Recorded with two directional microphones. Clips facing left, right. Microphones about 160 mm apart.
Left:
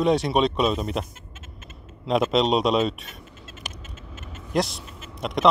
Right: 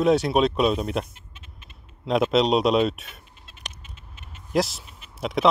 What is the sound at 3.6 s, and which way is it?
Typing, 5° left (ahead or behind).